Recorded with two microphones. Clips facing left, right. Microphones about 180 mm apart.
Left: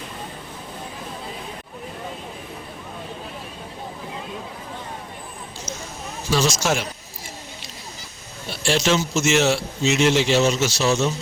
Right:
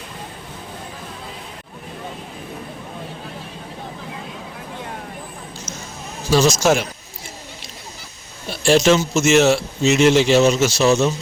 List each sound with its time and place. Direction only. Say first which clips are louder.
6.3 s a man's voice: right 6 dB; 45° right (ahead or behind)
8.6 s a man's voice: right 6 dB; 45° right (ahead or behind)